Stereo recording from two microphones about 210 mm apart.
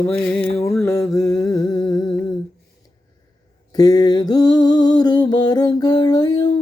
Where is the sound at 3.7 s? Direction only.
20° left (ahead or behind).